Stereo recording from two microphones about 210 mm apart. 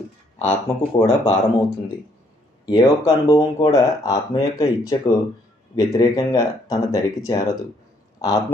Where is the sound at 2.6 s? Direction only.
20° left (ahead or behind).